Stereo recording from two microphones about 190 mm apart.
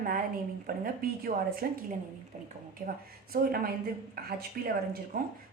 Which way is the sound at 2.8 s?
50° right (ahead or behind).